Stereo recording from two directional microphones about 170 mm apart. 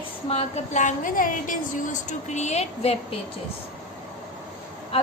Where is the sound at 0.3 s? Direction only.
40° left (ahead or behind).